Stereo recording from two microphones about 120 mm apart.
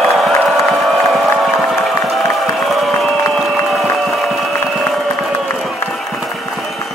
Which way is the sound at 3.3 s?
Centre (ahead or behind).